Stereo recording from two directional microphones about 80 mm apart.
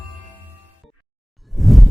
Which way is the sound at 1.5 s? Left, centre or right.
Centre.